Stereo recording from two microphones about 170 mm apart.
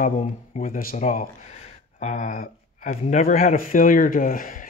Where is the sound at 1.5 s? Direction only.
45° left (ahead or behind).